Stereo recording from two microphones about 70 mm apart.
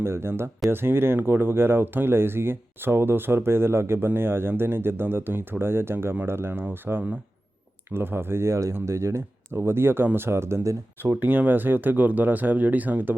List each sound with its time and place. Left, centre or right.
0.0 s speech: right
11.0 s speech: right